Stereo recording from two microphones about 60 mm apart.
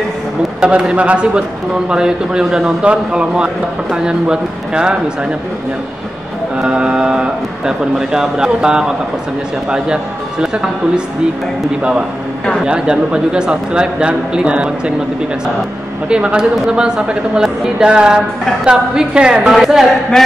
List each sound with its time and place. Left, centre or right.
0.6 s a woman's voice: centre
6.7 s a woman's voice: centre
10.4 s a woman's voice: centre
12.6 s a woman's voice: centre
16.1 s a woman's voice: centre
19.4 s a woman's voice: centre
20.1 s a sound: centre